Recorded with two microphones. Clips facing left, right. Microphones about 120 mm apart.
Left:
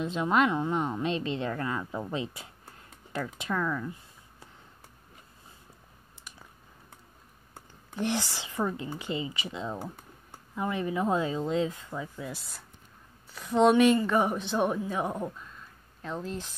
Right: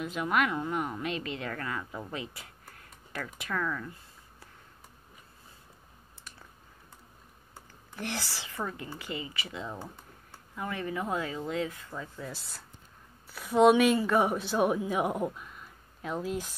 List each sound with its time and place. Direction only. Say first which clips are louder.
0.0 s a woman's voice: left 3 dB; 25° left (ahead or behind)
6.3 s a sound: left 1 dB; 15° left (ahead or behind)
7.9 s a woman's voice: left 6 dB; 20° left (ahead or behind)
12.3 s a woman's voice: left 2 dB; centre (ahead or behind)